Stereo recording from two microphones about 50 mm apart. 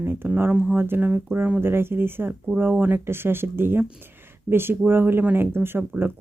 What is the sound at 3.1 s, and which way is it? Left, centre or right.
Speech, right.